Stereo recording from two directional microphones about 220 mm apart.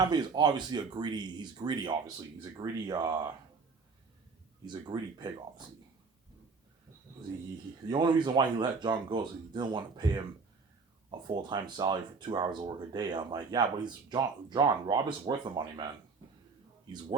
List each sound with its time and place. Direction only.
0.0 s speech: 20° right (ahead or behind)
4.6 s speech: 20° right (ahead or behind)
7.9 s speech: 20° right (ahead or behind)
11.4 s speech: 20° right (ahead or behind)